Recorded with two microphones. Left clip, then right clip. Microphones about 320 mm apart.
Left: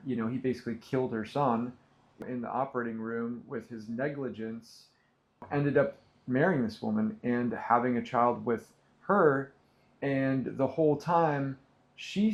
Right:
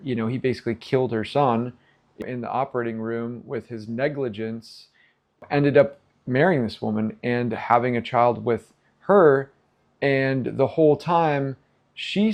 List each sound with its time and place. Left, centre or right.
0.1 s speech: right